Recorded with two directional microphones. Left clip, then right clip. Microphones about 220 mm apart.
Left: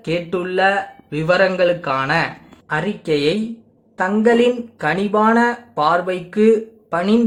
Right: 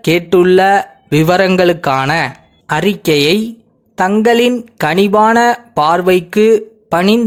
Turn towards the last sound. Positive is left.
turn(degrees=-40)  # may be behind; listen again after turning